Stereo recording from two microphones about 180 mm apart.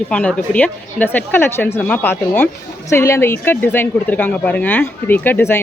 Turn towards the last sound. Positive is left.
turn(degrees=10)  # may be behind; listen again after turning